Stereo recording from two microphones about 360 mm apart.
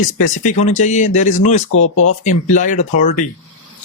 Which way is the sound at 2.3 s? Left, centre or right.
Centre.